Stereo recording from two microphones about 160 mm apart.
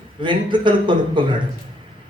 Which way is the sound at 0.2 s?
30° right (ahead or behind).